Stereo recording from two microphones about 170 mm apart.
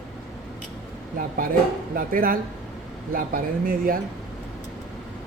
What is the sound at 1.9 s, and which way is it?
Speech, 55° right (ahead or behind).